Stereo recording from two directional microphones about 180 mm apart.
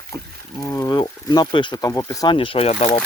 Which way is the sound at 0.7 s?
20° left (ahead or behind).